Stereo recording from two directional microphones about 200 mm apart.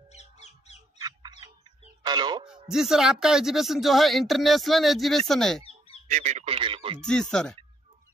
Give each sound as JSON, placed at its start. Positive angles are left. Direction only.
{"t": 0.1, "sound": "music", "side_deg": 35}
{"t": 2.0, "sound": "speech", "side_deg": -20}
{"t": 2.4, "sound": "speech", "side_deg": -5}
{"t": 6.0, "sound": "radio", "side_deg": -35}
{"t": 7.0, "sound": "speech", "side_deg": 5}